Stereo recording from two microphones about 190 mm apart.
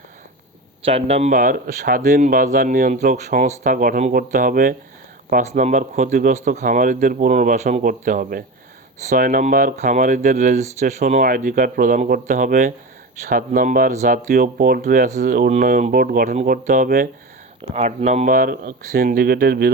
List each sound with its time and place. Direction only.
0.9 s speech: 35° right (ahead or behind); by 2.0 s 50° right (ahead or behind)
2.0 s speech: 40° right (ahead or behind); by 19.7 s 55° right (ahead or behind)